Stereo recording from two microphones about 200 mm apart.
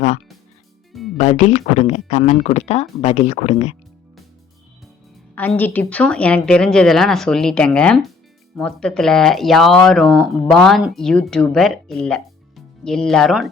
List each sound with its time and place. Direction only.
1.2 s speech: 35° left (ahead or behind)
5.3 s speech: 10° left (ahead or behind)